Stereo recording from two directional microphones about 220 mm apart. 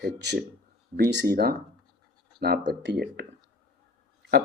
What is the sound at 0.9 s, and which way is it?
Speech, 45° right (ahead or behind).